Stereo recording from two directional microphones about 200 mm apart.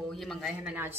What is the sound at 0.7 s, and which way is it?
Speech, 10° right (ahead or behind).